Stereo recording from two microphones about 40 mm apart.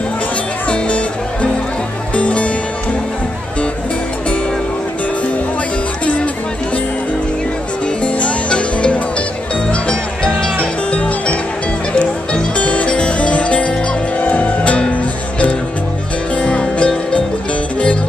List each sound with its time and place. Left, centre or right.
0.7 s music: left
8.0 s music: left
16.3 s music: left